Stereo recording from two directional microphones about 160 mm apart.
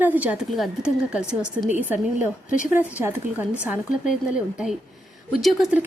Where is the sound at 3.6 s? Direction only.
5° right (ahead or behind).